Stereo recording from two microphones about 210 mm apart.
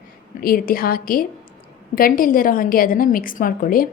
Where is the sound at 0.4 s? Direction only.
45° left (ahead or behind).